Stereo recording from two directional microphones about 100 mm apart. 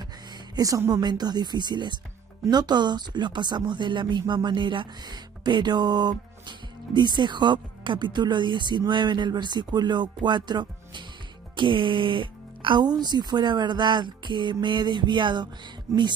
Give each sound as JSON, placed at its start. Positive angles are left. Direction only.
{"t": 0.3, "sound": "speech", "side_deg": -35}
{"t": 15.9, "sound": "speech", "side_deg": -30}